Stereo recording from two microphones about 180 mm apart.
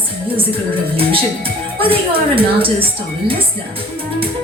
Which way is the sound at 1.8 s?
30° right (ahead or behind).